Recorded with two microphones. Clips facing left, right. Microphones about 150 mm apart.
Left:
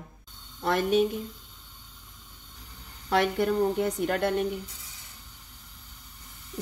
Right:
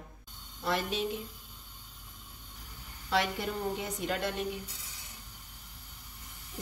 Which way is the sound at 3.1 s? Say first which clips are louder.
Left 7 dB; 55° left (ahead or behind).